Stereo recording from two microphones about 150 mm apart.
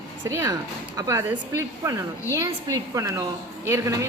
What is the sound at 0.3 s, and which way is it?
A woman's voice, 20° right (ahead or behind).